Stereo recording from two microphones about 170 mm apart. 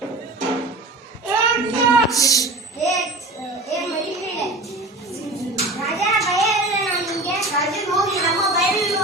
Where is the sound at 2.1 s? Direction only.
20° left (ahead or behind).